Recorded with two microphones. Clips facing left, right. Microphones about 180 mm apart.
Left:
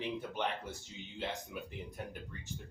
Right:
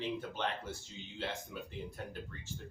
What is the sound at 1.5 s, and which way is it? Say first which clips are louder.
Speech: left 1 dB; 15° left (ahead or behind).